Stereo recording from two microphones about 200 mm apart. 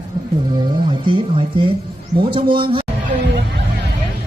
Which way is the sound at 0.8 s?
25° right (ahead or behind).